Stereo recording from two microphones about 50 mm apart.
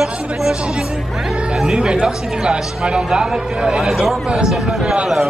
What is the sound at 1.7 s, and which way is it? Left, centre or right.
Speech, centre.